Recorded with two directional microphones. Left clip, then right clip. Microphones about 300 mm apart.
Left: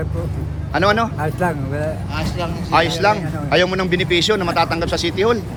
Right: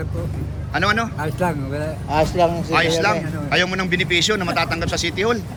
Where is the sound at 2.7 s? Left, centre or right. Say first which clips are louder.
Left 6 dB; centre.